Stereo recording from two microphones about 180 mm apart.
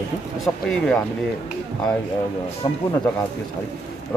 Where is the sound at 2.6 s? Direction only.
25° left (ahead or behind).